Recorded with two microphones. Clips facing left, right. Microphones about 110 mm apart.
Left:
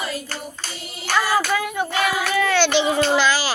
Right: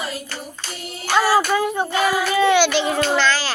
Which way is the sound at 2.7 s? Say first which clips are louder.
Left 1 dB; centre (ahead or behind).